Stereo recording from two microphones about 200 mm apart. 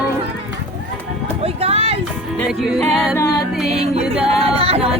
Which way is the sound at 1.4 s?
30° right (ahead or behind).